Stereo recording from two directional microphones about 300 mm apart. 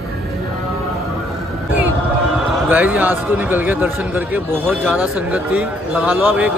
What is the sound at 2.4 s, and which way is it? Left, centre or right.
A man's voice, centre.